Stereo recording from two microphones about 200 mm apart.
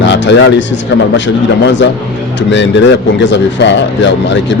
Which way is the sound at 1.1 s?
65° left (ahead or behind).